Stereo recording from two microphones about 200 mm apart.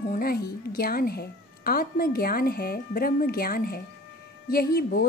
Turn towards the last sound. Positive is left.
turn(degrees=50)  # may be behind; listen again after turning